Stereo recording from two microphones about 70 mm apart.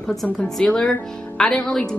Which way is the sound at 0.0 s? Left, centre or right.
Centre.